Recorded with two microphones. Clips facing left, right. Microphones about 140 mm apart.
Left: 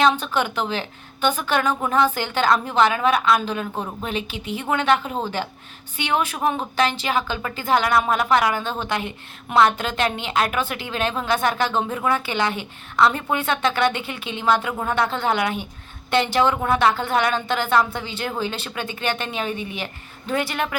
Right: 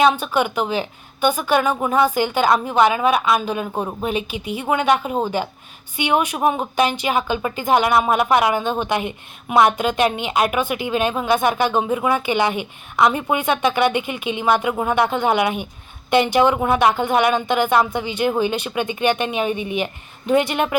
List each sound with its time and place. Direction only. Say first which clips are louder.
0.0 s a woman's voice: right 3 dB; 10° right (ahead or behind)